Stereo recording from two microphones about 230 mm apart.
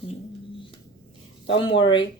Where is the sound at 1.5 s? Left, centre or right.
Left.